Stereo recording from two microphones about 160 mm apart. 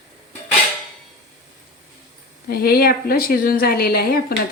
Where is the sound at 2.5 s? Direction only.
70° left (ahead or behind).